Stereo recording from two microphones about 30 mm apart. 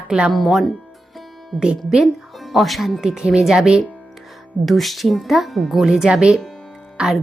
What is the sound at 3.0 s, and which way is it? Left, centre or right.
Speech, centre.